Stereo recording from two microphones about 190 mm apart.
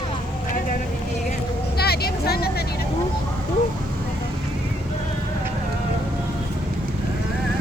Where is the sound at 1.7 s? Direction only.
55° left (ahead or behind).